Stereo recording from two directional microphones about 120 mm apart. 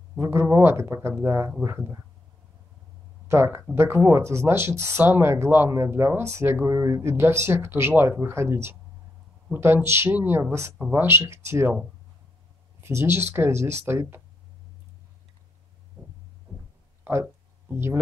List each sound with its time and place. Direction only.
0.1 s speech: 20° right (ahead or behind)
3.3 s speech: 25° right (ahead or behind)
12.8 s speech: 20° right (ahead or behind)
17.0 s a sound: 20° right (ahead or behind)